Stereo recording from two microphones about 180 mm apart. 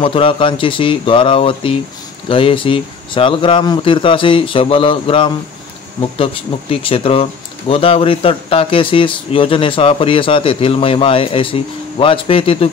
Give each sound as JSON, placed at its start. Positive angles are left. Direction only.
{"t": 0.0, "sound": "speech", "side_deg": 30}